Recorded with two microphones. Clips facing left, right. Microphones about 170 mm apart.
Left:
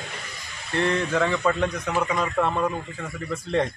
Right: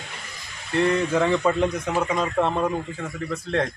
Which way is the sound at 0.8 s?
5° right (ahead or behind).